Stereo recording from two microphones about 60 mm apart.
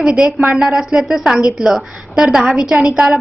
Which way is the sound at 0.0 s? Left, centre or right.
Centre.